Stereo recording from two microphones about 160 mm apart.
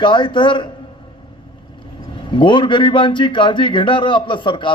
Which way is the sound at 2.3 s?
30° left (ahead or behind).